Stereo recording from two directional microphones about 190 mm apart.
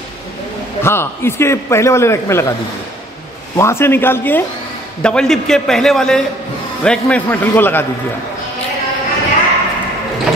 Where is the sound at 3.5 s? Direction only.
15° left (ahead or behind).